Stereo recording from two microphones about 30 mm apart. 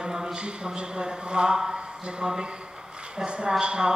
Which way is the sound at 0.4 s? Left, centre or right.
Right.